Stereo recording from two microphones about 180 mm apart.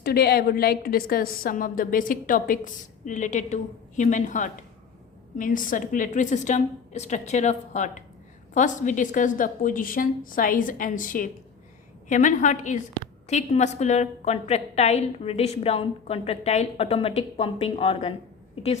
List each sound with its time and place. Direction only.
0.0 s a woman's voice: 60° left (ahead or behind); by 18.7 s 30° left (ahead or behind)